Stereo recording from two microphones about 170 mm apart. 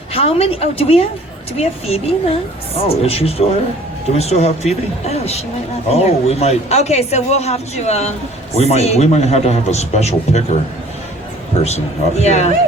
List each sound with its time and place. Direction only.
0.1 s speech: 35° left (ahead or behind)
11.6 s speech: 40° left (ahead or behind)